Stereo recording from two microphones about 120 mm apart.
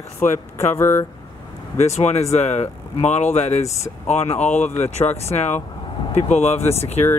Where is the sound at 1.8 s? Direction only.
65° left (ahead or behind).